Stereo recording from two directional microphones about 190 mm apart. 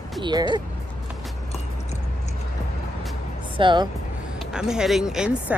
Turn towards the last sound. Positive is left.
turn(degrees=-5)  # may be behind; listen again after turning